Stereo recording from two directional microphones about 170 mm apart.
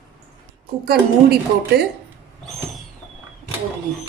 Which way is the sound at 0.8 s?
70° right (ahead or behind).